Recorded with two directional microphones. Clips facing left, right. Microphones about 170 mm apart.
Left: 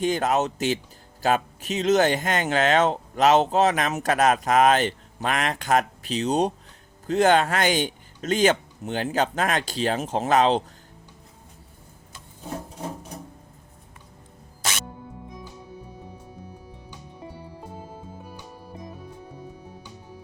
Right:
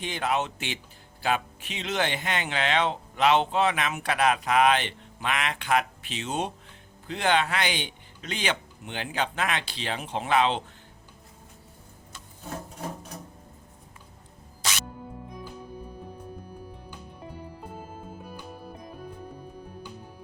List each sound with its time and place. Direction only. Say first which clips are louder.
0.0 s speech: left 6 dB; 40° left (ahead or behind)